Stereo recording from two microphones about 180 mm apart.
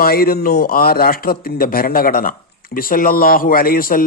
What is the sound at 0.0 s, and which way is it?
A man's voice, 55° left (ahead or behind).